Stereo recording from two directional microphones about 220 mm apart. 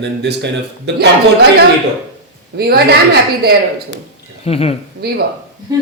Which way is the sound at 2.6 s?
45° right (ahead or behind).